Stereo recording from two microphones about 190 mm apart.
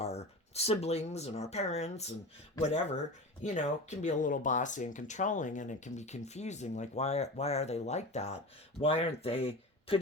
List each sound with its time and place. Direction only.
0.0 s speech: 35° left (ahead or behind)